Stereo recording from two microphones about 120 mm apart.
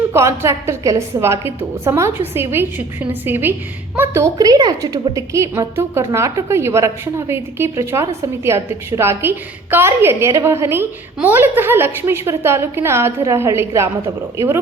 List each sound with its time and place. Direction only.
0.1 s a woman's voice: 20° right (ahead or behind)
4.4 s a woman's voice: 30° right (ahead or behind)